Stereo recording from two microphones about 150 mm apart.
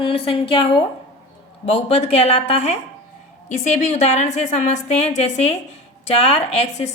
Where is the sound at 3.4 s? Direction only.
55° left (ahead or behind).